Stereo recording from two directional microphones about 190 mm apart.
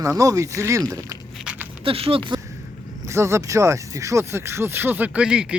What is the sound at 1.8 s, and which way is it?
Speech, 30° right (ahead or behind).